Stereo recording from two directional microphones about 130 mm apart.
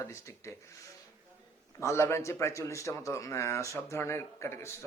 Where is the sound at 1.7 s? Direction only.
20° left (ahead or behind).